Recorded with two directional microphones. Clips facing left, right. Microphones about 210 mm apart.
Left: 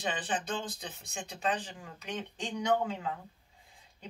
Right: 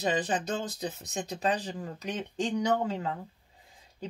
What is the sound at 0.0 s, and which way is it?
Speech, 40° right (ahead or behind).